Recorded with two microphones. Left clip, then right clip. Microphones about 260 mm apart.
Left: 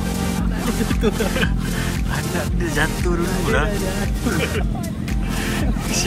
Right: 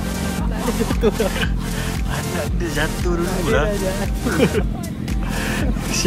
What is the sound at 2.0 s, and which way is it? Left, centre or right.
Speech, centre.